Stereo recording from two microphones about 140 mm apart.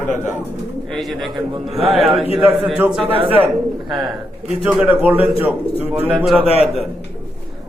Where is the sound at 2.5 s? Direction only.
Centre (ahead or behind).